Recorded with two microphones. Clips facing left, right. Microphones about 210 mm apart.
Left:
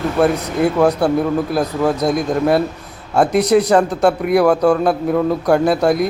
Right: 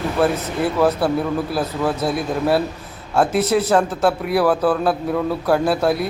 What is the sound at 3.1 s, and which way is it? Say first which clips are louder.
Speech: left 4 dB; centre (ahead or behind).